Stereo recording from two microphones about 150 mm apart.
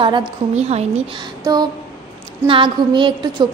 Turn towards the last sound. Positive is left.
turn(degrees=-35)  # may be behind; listen again after turning